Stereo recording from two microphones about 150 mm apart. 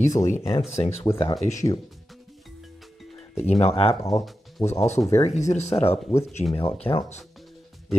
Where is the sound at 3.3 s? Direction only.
45° left (ahead or behind).